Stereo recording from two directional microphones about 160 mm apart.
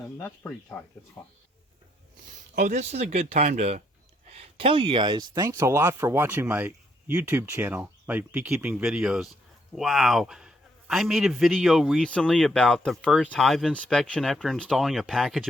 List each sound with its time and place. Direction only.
0.2 s speech: 10° left (ahead or behind)
2.6 s a man's voice: 45° right (ahead or behind); by 15.4 s centre (ahead or behind)